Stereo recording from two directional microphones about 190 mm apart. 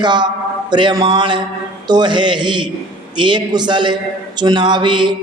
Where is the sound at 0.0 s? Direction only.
25° right (ahead or behind).